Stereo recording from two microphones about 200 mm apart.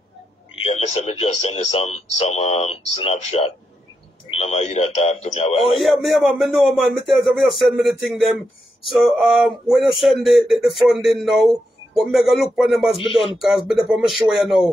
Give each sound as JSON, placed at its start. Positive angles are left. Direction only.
{"t": 0.7, "sound": "speech", "side_deg": 30}
{"t": 5.8, "sound": "speech", "side_deg": 0}
{"t": 12.9, "sound": "speech", "side_deg": 25}
{"t": 13.4, "sound": "speech", "side_deg": 0}